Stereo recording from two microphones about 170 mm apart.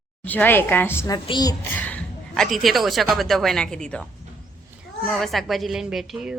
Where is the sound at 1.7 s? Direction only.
10° left (ahead or behind).